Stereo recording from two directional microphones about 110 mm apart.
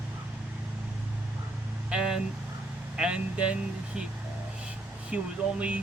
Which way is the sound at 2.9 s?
10° right (ahead or behind).